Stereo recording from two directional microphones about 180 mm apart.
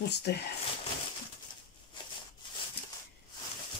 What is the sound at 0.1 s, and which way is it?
Speech, 65° left (ahead or behind).